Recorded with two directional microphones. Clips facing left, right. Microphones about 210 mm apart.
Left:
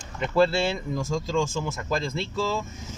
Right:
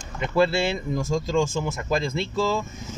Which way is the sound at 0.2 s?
10° right (ahead or behind).